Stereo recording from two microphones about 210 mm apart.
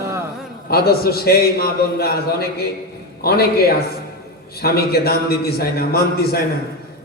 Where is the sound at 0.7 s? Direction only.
45° left (ahead or behind).